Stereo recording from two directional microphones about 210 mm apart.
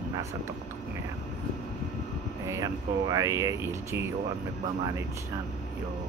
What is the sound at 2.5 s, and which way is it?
Speech, 15° right (ahead or behind).